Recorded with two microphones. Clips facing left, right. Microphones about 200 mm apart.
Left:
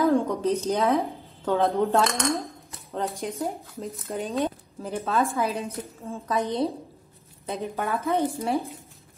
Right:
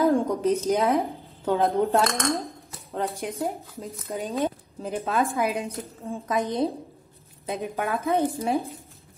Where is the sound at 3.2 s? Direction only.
Centre (ahead or behind).